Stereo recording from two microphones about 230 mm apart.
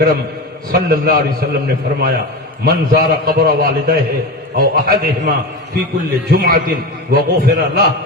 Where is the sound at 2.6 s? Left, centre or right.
Right.